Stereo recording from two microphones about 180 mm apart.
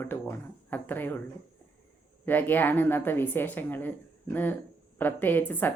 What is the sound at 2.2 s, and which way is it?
Speech, 10° left (ahead or behind).